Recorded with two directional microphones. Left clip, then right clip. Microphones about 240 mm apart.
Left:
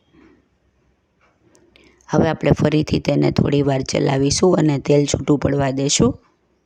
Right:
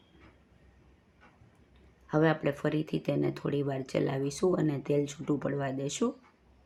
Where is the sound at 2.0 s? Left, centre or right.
Left.